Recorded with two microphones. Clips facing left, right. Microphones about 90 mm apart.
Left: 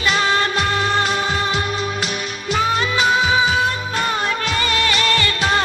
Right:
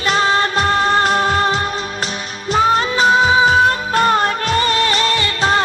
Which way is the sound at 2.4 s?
35° right (ahead or behind).